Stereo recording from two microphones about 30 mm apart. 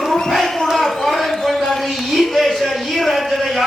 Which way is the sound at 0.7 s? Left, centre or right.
Centre.